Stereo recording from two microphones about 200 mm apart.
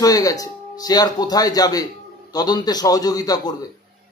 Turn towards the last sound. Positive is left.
turn(degrees=20)  # may be behind; listen again after turning